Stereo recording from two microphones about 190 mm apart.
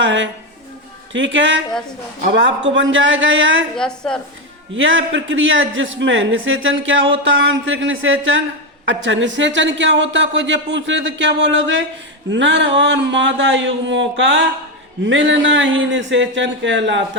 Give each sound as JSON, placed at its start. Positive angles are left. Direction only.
{"t": 0.0, "sound": "a man's voice", "side_deg": -70}
{"t": 2.6, "sound": "a man's voice", "side_deg": -75}
{"t": 3.8, "sound": "a woman's voice", "side_deg": 5}
{"t": 4.7, "sound": "a man's voice", "side_deg": -80}
{"t": 12.3, "sound": "a man's voice", "side_deg": -70}